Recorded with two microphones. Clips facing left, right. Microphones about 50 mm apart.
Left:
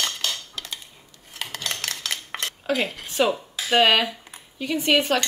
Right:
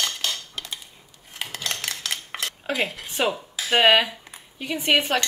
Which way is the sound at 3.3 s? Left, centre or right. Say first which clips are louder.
Left 1 dB; centre.